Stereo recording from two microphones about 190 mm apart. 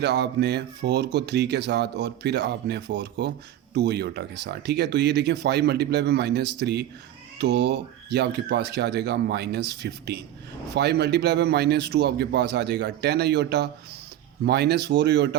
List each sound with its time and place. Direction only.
0.0 s speech: 60° right (ahead or behind)